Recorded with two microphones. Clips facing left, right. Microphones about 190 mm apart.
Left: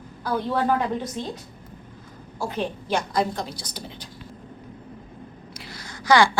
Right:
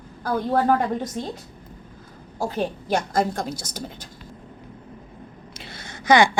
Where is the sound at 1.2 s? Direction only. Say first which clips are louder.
Right 1 dB; 45° right (ahead or behind).